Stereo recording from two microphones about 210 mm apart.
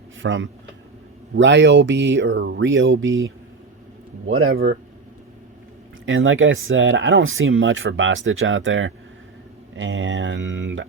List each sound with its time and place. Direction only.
0.2 s speech: 65° right (ahead or behind)
4.3 s speech: 75° right (ahead or behind)
4.5 s speech: 50° right (ahead or behind)
6.1 s speech: 65° right (ahead or behind)